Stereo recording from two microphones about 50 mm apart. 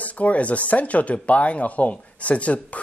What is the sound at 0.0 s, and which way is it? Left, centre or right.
Speech, left.